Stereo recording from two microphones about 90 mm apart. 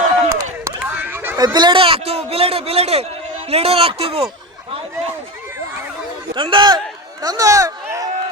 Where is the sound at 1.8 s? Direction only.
90° right.